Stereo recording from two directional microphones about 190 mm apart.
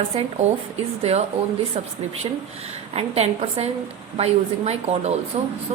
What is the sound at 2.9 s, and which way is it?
A woman's voice, 30° right (ahead or behind).